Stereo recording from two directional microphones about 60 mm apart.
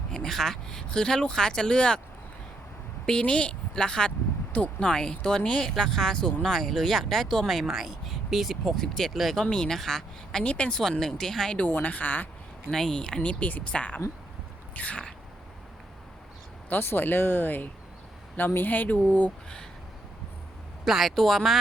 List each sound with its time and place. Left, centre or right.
0.1 s speech: centre
3.1 s speech: centre
10.4 s speech: centre
11.7 s a woman's voice: left
12.7 s a woman's voice: centre; by 15.0 s left
16.6 s speech: left
20.8 s speech: centre